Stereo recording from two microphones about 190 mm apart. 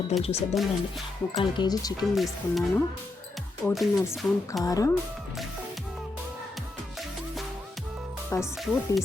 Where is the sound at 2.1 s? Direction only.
Centre (ahead or behind).